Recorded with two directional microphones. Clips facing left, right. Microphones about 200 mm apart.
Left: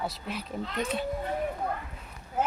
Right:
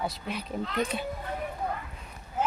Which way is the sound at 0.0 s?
Centre (ahead or behind).